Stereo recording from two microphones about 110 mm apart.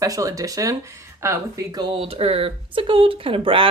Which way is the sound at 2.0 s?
65° right (ahead or behind).